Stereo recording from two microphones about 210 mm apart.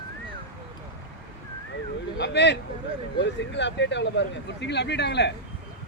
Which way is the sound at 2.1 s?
55° left (ahead or behind).